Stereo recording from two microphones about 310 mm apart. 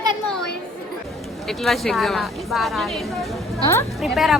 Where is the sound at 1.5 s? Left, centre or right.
Centre.